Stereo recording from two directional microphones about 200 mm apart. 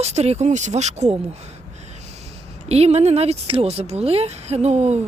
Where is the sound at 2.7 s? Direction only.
30° right (ahead or behind).